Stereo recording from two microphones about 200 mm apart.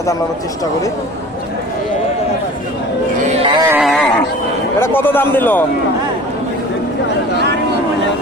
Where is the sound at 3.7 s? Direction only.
5° right (ahead or behind).